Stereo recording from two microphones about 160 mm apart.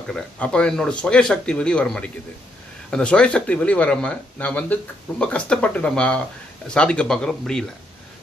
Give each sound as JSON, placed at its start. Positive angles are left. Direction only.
{"t": 0.1, "sound": "speech", "side_deg": 5}